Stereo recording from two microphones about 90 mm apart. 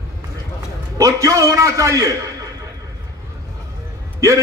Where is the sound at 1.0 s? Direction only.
40° right (ahead or behind).